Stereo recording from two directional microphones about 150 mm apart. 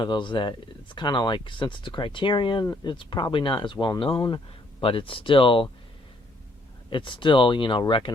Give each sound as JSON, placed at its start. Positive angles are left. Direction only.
{"t": 0.0, "sound": "speech", "side_deg": 30}
{"t": 6.9, "sound": "speech", "side_deg": 35}